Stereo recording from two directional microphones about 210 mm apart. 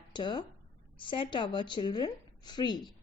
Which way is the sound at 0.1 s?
20° left (ahead or behind).